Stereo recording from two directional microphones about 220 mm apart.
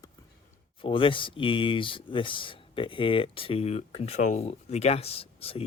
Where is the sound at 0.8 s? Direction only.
25° left (ahead or behind).